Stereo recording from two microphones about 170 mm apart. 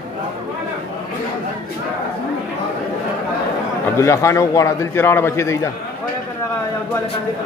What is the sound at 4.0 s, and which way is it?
A man's voice, 15° left (ahead or behind).